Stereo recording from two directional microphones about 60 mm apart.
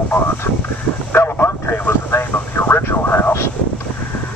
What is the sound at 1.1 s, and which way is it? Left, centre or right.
Vehicle, left.